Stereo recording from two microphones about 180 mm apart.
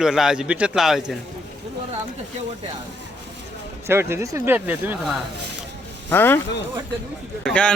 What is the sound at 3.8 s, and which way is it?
Speech, 15° right (ahead or behind).